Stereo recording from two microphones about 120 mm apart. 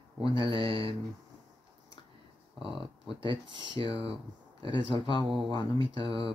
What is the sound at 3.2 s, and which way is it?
Speech, 45° right (ahead or behind).